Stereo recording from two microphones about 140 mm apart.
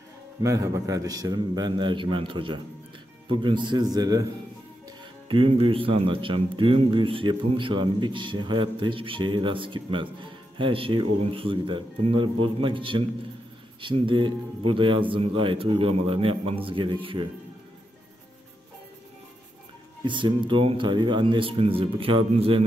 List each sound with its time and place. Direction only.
0.4 s a man's voice: 20° right (ahead or behind)
5.3 s speech: 40° right (ahead or behind)
20.1 s speech: 35° right (ahead or behind)